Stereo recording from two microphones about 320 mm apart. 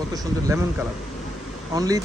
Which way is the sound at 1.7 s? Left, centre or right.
Centre.